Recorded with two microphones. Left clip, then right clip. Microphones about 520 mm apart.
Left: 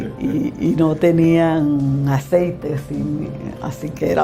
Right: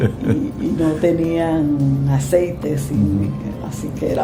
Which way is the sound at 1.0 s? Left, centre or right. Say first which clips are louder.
Left 4 dB; left.